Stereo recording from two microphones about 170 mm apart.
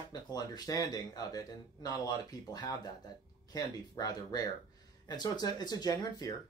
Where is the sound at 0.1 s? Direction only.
25° left (ahead or behind).